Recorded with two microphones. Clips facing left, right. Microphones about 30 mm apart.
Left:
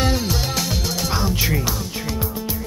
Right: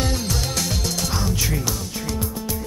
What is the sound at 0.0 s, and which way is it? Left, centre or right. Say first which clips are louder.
Music: left 3 dB; centre.